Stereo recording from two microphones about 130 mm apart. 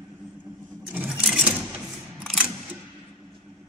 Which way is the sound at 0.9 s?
10° right (ahead or behind).